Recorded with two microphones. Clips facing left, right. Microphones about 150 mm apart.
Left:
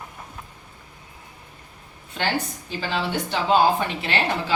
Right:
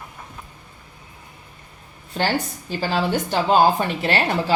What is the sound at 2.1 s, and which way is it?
A woman's voice, 35° right (ahead or behind).